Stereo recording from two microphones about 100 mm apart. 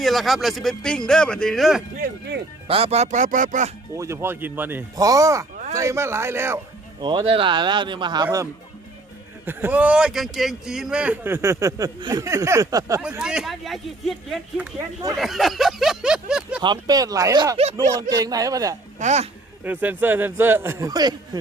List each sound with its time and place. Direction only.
0.0 s speech: centre (ahead or behind)
2.6 s speech: 75° right (ahead or behind)
3.9 s speech: 30° right (ahead or behind)
4.9 s speech: 35° right (ahead or behind)
7.0 s speech: 50° right (ahead or behind)
9.5 s a man's voice: 20° right (ahead or behind)
11.9 s speech: 45° right (ahead or behind)
12.2 s speech: 30° right (ahead or behind)
13.0 s speech: 10° right (ahead or behind)
16.6 s speech: 40° right (ahead or behind)
19.6 s speech: 15° right (ahead or behind)
20.9 s speech: 45° right (ahead or behind)